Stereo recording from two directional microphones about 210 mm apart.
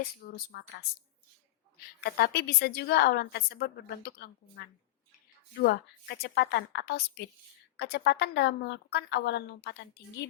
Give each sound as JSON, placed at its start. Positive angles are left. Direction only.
{"t": 0.3, "sound": "a woman's voice", "side_deg": 45}
{"t": 2.0, "sound": "a woman's voice", "side_deg": 50}